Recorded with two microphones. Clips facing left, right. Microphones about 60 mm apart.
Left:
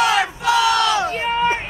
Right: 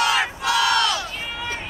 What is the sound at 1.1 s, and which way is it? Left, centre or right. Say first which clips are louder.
Run: left 12 dB; left.